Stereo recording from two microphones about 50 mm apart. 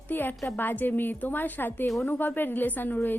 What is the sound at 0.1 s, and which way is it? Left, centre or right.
A woman's voice, left.